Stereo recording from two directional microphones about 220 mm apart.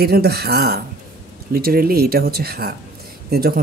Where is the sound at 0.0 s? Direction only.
45° right (ahead or behind).